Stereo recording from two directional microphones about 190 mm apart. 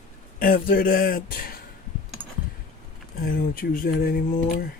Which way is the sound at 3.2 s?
50° left (ahead or behind).